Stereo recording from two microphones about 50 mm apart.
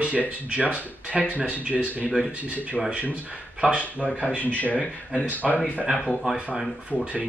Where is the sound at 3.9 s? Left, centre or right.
Left.